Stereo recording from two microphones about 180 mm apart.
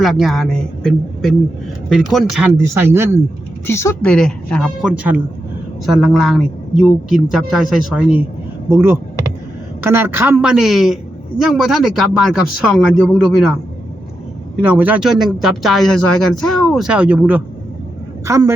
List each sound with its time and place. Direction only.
0.0 s speech: centre (ahead or behind)
2.6 s a woman's voice: 15° right (ahead or behind)
3.7 s speech: 15° left (ahead or behind); by 8.2 s 5° right (ahead or behind)
8.7 s a woman's voice: 15° right (ahead or behind)
14.6 s a woman's voice: 10° right (ahead or behind)